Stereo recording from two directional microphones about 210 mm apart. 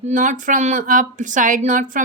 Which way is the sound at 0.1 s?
40° right (ahead or behind).